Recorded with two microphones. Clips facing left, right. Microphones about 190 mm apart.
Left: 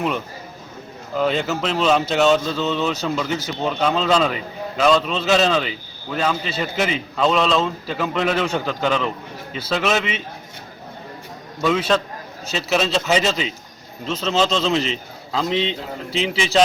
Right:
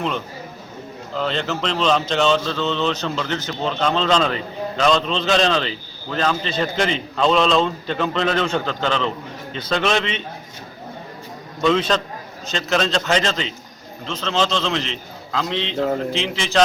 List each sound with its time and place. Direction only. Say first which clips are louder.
1.1 s a man's voice: left 3 dB; 10° left (ahead or behind)
11.6 s a man's voice: right 1 dB; 5° left (ahead or behind)